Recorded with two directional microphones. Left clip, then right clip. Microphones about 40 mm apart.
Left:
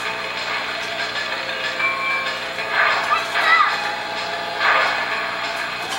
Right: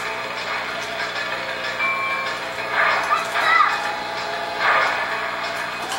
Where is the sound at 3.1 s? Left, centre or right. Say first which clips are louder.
Left 2 dB; left.